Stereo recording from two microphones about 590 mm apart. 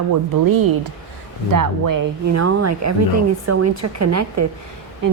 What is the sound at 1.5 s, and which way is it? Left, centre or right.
A woman's voice, right.